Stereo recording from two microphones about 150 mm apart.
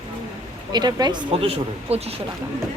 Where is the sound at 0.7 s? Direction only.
25° right (ahead or behind); by 2.1 s 45° right (ahead or behind).